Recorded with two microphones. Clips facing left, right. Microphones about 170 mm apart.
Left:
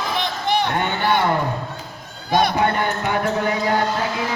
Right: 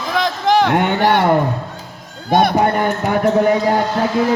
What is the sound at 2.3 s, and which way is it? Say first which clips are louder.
Speech: right 4 dB; 55° right (ahead or behind).